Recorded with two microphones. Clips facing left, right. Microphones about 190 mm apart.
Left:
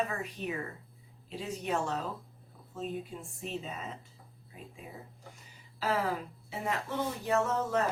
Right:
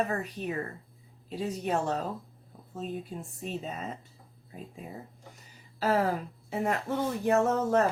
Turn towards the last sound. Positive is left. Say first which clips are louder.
# right 5 dB
turn(degrees=-50)  # may be behind; listen again after turning